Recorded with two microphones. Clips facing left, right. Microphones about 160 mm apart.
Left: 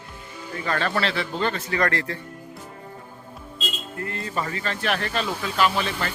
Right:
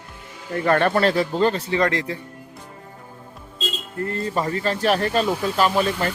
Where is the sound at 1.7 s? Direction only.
20° right (ahead or behind).